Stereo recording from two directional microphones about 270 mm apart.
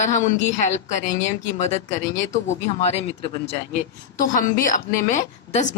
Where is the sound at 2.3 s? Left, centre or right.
Left.